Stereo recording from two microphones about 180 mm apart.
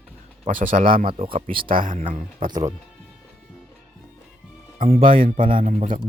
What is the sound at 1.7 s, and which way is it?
Speech, 45° right (ahead or behind).